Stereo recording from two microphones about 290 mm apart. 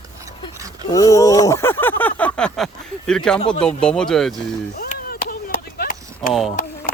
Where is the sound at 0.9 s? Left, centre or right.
Centre.